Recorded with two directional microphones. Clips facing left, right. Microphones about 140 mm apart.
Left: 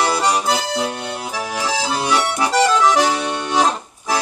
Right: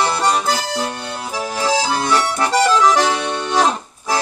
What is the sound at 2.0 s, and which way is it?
Accordion, 15° left (ahead or behind).